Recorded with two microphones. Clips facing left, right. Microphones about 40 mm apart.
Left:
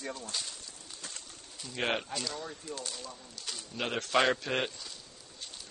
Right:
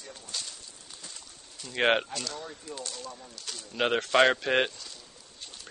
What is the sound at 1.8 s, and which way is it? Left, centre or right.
Speech, right.